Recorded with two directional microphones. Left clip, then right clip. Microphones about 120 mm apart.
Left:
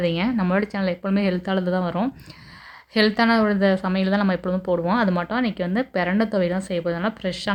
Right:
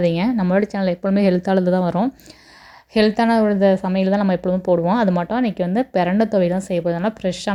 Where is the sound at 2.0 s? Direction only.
50° right (ahead or behind).